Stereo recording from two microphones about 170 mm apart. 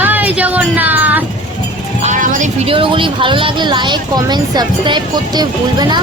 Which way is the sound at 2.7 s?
30° right (ahead or behind).